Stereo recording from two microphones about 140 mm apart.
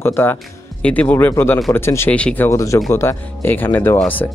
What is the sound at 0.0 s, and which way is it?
Speech, 15° left (ahead or behind).